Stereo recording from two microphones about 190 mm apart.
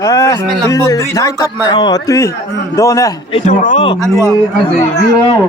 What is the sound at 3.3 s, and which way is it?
Speech, 40° left (ahead or behind).